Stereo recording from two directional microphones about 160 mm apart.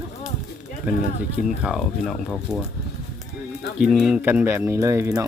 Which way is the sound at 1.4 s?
5° right (ahead or behind).